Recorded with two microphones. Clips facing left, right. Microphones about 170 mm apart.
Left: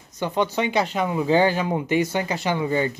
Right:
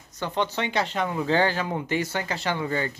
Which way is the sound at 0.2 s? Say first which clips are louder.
Left 4 dB; 15° left (ahead or behind).